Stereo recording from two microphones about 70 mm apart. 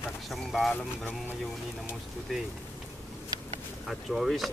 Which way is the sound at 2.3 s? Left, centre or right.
Centre.